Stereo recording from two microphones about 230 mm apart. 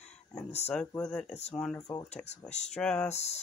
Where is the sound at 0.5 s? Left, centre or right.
Left.